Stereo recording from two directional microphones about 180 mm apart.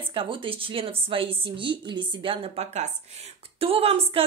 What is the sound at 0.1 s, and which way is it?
A woman's voice, 30° right (ahead or behind).